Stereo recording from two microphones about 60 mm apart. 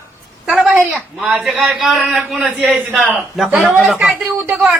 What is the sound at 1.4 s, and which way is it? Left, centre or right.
A man's voice, centre.